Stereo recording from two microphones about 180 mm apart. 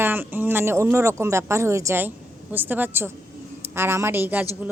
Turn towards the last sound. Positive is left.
turn(degrees=-10)  # may be behind; listen again after turning